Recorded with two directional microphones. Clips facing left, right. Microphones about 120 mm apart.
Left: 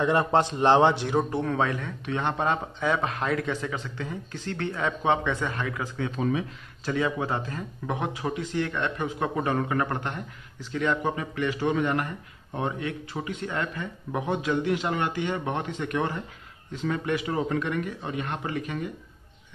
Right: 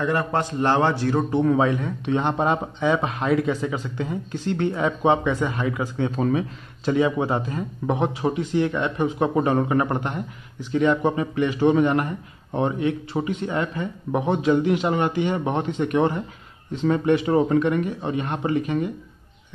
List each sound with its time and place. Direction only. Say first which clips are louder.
0.0 s a man's voice: left 1 dB; 20° left (ahead or behind)
1.4 s speech: right 7 dB; 10° right (ahead or behind)
2.8 s speech: right 5 dB; centre (ahead or behind)
6.1 s speech: right 4 dB; 40° right (ahead or behind)
6.8 s speech: right 6 dB; 20° right (ahead or behind)
7.8 s speech: right 7 dB; 25° right (ahead or behind)